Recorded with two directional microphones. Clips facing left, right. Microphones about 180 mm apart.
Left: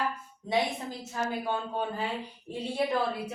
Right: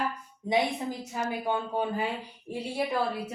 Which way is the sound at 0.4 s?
15° right (ahead or behind).